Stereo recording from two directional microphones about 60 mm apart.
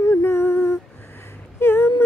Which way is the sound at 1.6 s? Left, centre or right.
Left.